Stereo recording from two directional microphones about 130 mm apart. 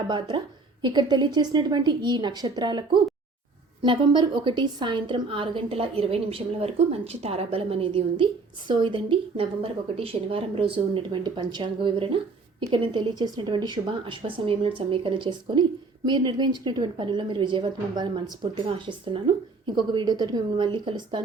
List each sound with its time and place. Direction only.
0.1 s a woman's voice: 35° right (ahead or behind)